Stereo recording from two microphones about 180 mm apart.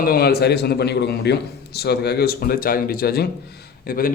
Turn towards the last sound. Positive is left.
turn(degrees=55)  # may be behind; listen again after turning